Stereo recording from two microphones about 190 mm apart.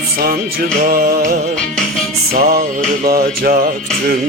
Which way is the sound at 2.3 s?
55° right (ahead or behind).